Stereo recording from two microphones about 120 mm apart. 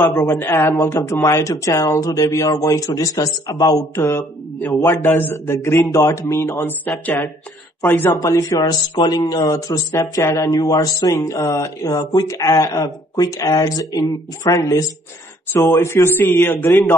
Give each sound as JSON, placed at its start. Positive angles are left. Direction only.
{"t": 0.0, "sound": "speech", "side_deg": 25}
{"t": 8.1, "sound": "speech", "side_deg": 30}